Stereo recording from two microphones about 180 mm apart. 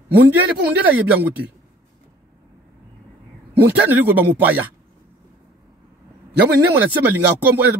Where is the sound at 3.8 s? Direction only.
10° right (ahead or behind).